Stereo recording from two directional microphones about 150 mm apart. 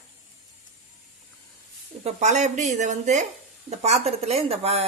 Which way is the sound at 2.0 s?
50° right (ahead or behind).